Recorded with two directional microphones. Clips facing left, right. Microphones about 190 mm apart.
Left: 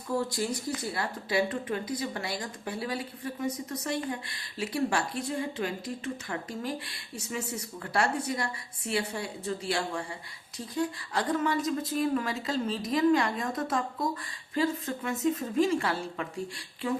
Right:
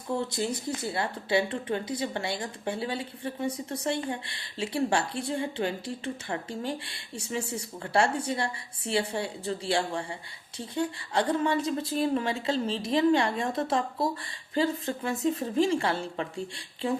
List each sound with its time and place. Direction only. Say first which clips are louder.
0.2 s speech: right 1 dB; 20° right (ahead or behind)